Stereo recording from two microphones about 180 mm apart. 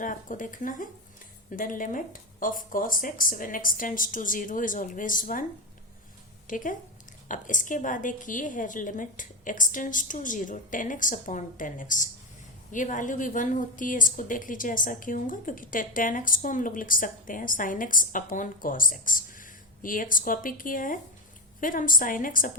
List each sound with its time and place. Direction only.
0.0 s a woman's voice: 45° left (ahead or behind)
6.5 s a woman's voice: 45° left (ahead or behind)